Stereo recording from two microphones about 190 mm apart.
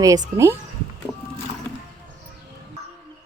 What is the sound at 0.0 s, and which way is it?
Speech, 20° right (ahead or behind).